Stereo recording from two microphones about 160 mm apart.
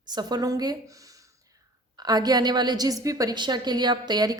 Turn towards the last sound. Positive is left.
turn(degrees=-25)  # may be behind; listen again after turning